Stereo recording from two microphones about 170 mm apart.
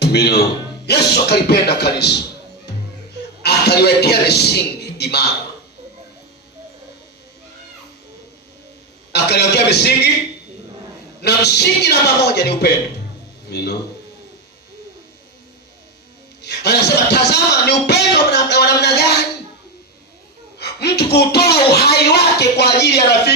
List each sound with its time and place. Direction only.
0.0 s a man's voice: 75° left (ahead or behind)
3.4 s a man's voice: 75° left (ahead or behind)
9.1 s speech: 75° left (ahead or behind)
11.2 s speech: 75° left (ahead or behind)
16.4 s speech: 80° left
20.6 s speech: 75° left (ahead or behind)